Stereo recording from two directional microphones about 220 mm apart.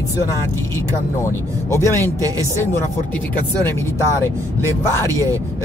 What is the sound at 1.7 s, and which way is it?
Speech, 10° left (ahead or behind).